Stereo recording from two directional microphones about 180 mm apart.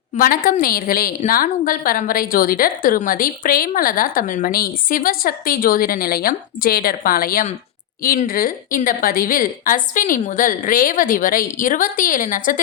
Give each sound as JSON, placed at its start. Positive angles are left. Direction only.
{"t": 0.2, "sound": "a woman's voice", "side_deg": 50}